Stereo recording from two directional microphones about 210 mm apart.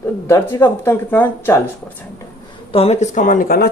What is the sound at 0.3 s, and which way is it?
Speech, 15° left (ahead or behind).